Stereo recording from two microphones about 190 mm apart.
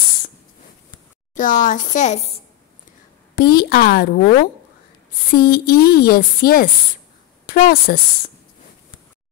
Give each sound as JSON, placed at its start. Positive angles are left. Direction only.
{"t": 1.3, "sound": "a woman's voice", "side_deg": 45}
{"t": 3.3, "sound": "speech", "side_deg": 55}
{"t": 5.3, "sound": "speech", "side_deg": 55}